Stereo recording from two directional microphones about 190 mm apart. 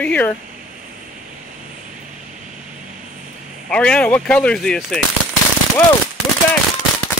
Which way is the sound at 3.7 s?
5° left (ahead or behind).